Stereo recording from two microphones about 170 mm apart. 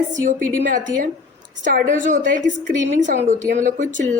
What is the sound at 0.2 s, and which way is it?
Speech, 50° right (ahead or behind).